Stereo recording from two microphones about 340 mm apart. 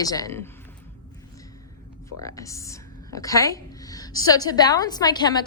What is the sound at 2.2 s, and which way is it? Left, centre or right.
A woman's voice, centre.